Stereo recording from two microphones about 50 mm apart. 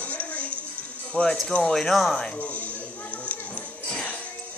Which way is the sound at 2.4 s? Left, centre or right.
Left.